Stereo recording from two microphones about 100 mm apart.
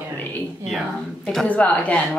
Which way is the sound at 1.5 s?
15° left (ahead or behind).